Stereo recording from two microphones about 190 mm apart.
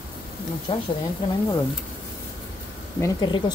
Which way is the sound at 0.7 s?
30° left (ahead or behind).